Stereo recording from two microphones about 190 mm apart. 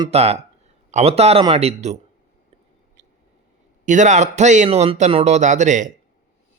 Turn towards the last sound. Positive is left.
turn(degrees=-40)  # may be behind; listen again after turning